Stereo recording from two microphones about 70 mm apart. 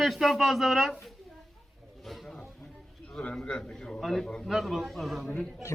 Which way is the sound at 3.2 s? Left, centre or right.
Centre.